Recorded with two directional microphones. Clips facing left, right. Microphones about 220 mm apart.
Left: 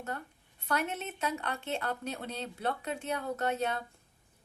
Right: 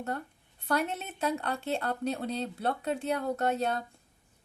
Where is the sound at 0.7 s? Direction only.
35° right (ahead or behind).